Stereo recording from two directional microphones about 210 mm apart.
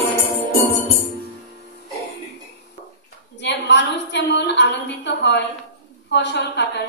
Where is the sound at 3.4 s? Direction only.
55° left (ahead or behind).